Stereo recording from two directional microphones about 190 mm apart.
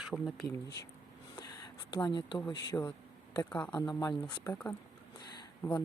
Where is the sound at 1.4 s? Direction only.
20° left (ahead or behind).